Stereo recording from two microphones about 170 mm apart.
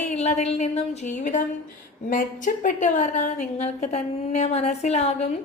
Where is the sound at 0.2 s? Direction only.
40° left (ahead or behind).